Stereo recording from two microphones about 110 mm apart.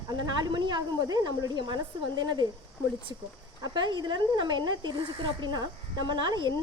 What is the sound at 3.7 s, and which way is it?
Speech, 45° right (ahead or behind).